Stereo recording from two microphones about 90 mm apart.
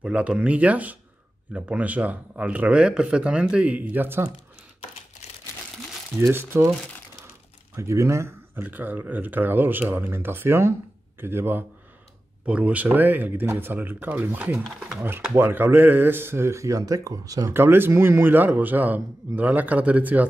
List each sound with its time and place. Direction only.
0.0 s speech: 10° right (ahead or behind)
6.1 s a man's voice: 25° right (ahead or behind)
7.7 s speech: 35° right (ahead or behind)
8.6 s a man's voice: 20° right (ahead or behind)
12.4 s a man's voice: 15° right (ahead or behind)
14.6 s speech: 5° right (ahead or behind)
15.0 s a man's voice: 25° right (ahead or behind); by 17.5 s 40° right (ahead or behind)
17.5 s a man's voice: 25° right (ahead or behind)